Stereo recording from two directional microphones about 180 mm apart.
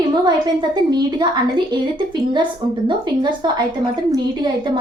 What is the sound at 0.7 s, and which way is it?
Speech, 25° right (ahead or behind).